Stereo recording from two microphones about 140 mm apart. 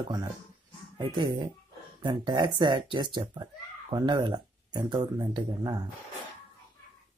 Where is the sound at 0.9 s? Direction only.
35° right (ahead or behind).